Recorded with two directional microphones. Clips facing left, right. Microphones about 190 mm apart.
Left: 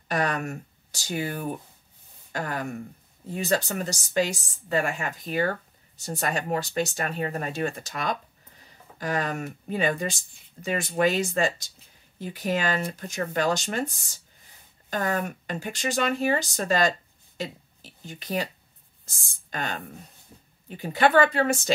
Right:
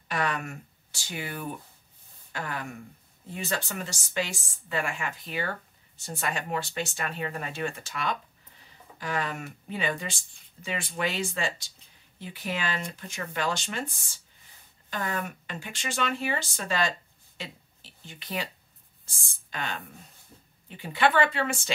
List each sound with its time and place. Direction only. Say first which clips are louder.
0.1 s a woman's voice: left 4 dB; 40° left (ahead or behind)